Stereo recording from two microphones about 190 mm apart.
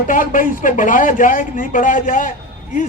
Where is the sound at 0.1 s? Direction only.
45° left (ahead or behind).